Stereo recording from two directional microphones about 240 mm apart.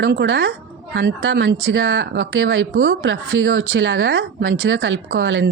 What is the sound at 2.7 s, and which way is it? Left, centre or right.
Speech, right.